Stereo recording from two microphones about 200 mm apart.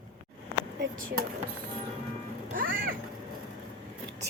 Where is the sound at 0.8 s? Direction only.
75° right (ahead or behind).